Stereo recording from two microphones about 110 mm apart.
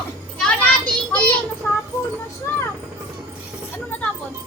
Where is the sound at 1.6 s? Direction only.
20° left (ahead or behind).